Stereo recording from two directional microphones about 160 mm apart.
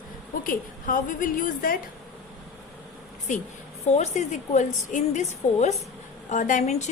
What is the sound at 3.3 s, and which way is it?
A woman's voice, 50° left (ahead or behind).